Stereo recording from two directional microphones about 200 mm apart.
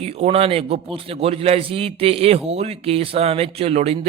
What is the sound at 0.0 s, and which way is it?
A man's voice, 30° right (ahead or behind).